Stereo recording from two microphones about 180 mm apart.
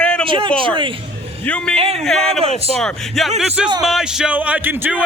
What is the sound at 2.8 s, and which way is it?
Speech, centre (ahead or behind).